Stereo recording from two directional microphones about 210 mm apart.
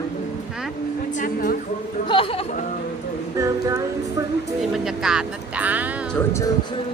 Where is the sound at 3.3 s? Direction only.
15° right (ahead or behind).